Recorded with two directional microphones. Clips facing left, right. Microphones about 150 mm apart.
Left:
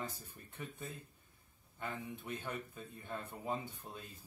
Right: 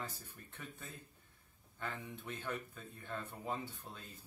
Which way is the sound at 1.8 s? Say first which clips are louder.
Left 1 dB; 15° left (ahead or behind).